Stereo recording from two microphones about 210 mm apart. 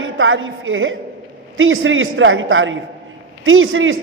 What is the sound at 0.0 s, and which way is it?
A woman's voice, 65° right (ahead or behind).